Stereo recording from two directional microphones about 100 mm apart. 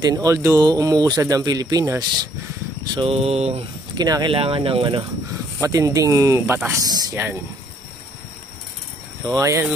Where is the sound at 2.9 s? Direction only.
65° right (ahead or behind); by 3.6 s 90° right.